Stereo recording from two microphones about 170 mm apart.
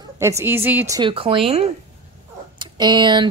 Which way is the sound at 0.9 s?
30° right (ahead or behind).